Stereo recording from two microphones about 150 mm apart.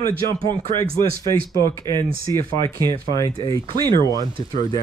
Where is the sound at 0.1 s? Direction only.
35° right (ahead or behind).